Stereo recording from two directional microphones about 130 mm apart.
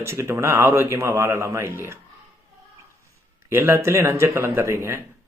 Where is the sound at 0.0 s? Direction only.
20° right (ahead or behind).